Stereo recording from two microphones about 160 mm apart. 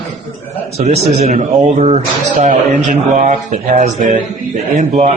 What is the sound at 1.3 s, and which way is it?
Speech, 50° right (ahead or behind).